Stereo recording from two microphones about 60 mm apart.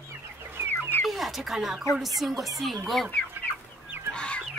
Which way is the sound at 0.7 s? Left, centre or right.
Left.